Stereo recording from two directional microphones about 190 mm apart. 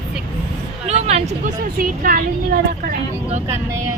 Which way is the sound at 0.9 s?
35° right (ahead or behind).